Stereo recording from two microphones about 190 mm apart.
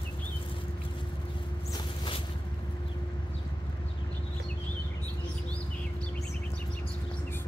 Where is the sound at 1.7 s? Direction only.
25° left (ahead or behind).